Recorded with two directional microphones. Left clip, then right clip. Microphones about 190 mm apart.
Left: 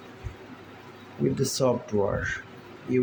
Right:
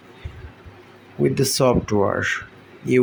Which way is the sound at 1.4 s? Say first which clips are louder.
Right 7 dB; 35° right (ahead or behind).